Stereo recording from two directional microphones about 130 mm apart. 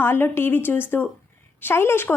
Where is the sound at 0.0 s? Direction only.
15° left (ahead or behind).